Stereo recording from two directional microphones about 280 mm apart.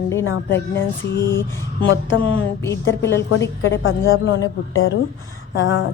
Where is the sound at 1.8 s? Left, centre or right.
Left.